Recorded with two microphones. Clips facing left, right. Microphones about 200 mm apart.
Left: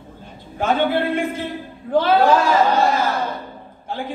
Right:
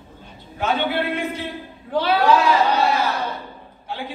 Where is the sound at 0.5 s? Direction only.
50° left (ahead or behind).